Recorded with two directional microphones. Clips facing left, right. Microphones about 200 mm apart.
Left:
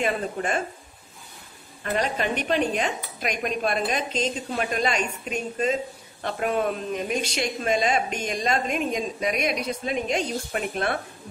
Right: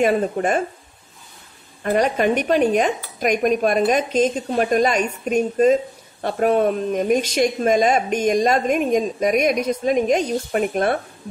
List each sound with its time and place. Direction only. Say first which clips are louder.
0.0 s speech: right 8 dB; 40° right (ahead or behind)
1.9 s speech: right 8 dB; 45° right (ahead or behind)